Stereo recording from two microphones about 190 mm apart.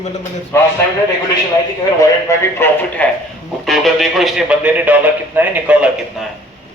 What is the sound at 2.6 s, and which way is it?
A man's voice, 10° left (ahead or behind).